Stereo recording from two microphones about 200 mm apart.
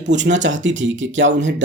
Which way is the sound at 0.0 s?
65° right (ahead or behind).